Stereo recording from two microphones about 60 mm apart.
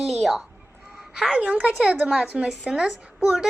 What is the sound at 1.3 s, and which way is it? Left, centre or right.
A woman's voice, right.